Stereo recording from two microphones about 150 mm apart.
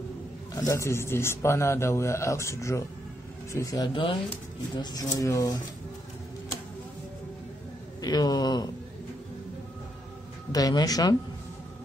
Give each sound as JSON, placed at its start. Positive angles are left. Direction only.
{"t": 0.6, "sound": "a man's voice", "side_deg": 20}
{"t": 8.0, "sound": "a man's voice", "side_deg": 25}
{"t": 10.5, "sound": "a man's voice", "side_deg": 25}